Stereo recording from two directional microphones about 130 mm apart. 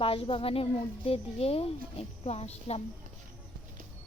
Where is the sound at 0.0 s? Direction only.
45° left (ahead or behind).